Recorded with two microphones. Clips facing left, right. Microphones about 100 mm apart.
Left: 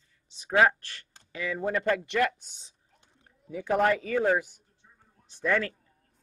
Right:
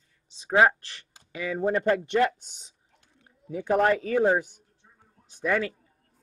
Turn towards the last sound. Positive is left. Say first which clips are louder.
# right 1 dB
turn(degrees=-15)  # may be behind; listen again after turning